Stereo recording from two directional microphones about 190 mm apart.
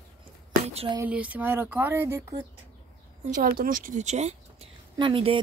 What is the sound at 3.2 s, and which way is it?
A woman's voice, 45° right (ahead or behind).